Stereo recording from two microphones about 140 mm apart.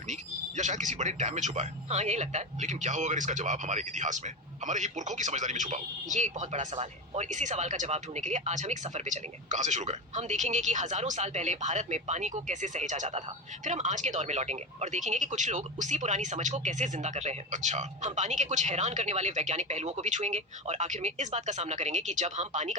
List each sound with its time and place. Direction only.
0.1 s speech: 60° right (ahead or behind)